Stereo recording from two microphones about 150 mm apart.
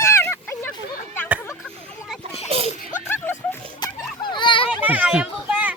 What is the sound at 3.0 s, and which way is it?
Music, 15° left (ahead or behind).